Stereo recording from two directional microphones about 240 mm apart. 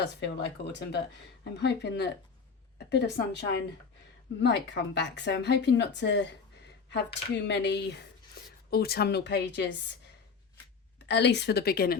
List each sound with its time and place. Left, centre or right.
0.0 s speech: left
11.1 s speech: left